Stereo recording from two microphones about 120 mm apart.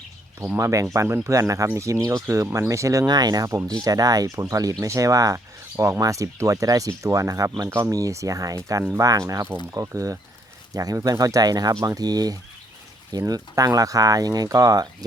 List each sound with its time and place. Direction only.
0.3 s speech: 25° right (ahead or behind)